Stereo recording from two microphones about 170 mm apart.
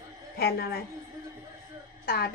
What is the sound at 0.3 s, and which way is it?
Speech, 70° left (ahead or behind).